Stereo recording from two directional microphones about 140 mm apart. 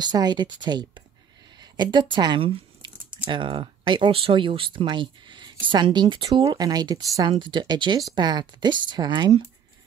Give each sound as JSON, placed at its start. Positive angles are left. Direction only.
{"t": 0.0, "sound": "speech", "side_deg": -30}